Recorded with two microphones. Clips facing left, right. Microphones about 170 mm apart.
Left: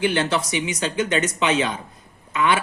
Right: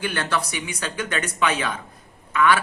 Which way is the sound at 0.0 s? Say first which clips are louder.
Left 5 dB; 25° left (ahead or behind).